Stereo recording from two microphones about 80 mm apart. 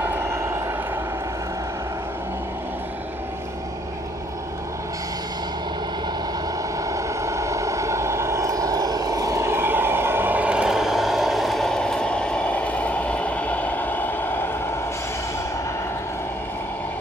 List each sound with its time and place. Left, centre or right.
0.0 s vehicle: right
6.9 s vehicle: right; by 14.5 s left